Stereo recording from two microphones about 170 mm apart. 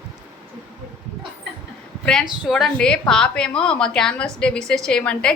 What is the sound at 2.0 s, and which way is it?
A woman's voice, centre (ahead or behind).